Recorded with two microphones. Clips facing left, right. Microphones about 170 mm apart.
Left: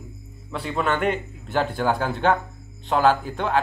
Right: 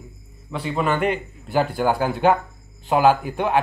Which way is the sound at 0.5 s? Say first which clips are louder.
Right 2 dB; centre (ahead or behind).